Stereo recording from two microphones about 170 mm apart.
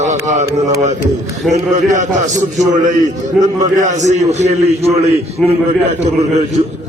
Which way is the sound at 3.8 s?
45° right (ahead or behind).